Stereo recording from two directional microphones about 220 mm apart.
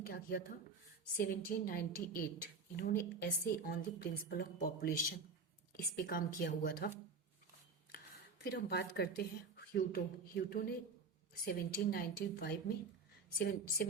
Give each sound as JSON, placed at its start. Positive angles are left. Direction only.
{"t": 0.0, "sound": "a woman's voice", "side_deg": 45}
{"t": 8.4, "sound": "speech", "side_deg": 45}